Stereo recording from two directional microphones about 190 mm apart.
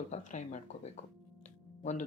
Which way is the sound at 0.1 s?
40° left (ahead or behind).